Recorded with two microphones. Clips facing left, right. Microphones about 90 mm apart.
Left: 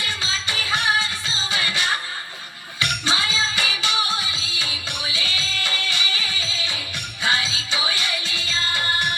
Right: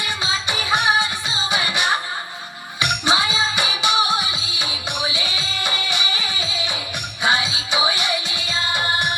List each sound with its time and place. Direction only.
0.0 s music: 20° right (ahead or behind)